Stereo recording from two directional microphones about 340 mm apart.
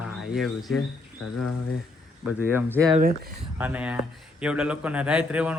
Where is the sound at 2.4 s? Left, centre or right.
Centre.